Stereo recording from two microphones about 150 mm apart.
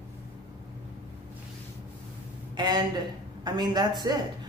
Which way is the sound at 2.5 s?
30° right (ahead or behind).